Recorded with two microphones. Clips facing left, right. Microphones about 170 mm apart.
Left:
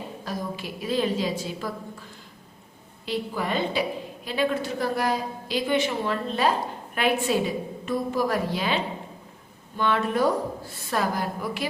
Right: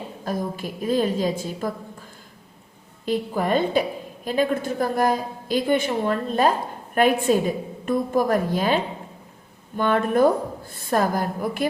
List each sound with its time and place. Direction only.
0.3 s a woman's voice: 45° right (ahead or behind)
3.1 s a woman's voice: 50° right (ahead or behind)